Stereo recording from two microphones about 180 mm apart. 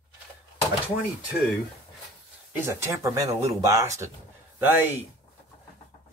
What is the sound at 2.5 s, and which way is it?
Speech, 15° right (ahead or behind).